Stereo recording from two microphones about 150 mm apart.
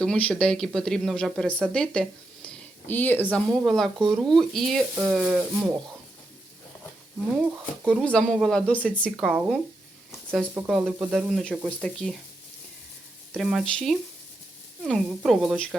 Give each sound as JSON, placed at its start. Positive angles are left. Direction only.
{"t": 0.0, "sound": "speech", "side_deg": 5}
{"t": 7.9, "sound": "speech", "side_deg": 5}
{"t": 9.1, "sound": "speech", "side_deg": -5}
{"t": 10.7, "sound": "speech", "side_deg": 0}
{"t": 13.3, "sound": "speech", "side_deg": 0}